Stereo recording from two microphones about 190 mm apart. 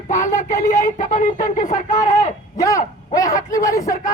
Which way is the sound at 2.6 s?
15° left (ahead or behind).